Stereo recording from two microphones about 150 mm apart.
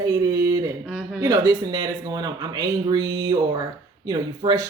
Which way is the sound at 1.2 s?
25° right (ahead or behind).